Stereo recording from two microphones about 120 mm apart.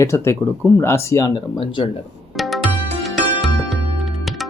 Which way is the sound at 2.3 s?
Centre (ahead or behind).